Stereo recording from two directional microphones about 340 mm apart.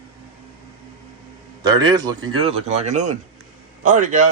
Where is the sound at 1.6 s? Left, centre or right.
Centre.